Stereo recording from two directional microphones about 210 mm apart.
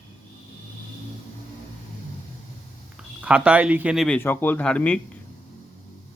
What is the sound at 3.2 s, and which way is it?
Speech, 5° right (ahead or behind).